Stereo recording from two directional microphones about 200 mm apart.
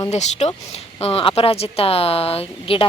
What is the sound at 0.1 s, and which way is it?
Speech, 35° left (ahead or behind).